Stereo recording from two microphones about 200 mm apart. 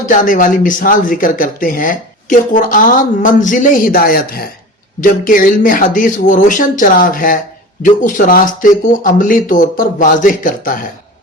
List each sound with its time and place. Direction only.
0.0 s speech: 40° left (ahead or behind)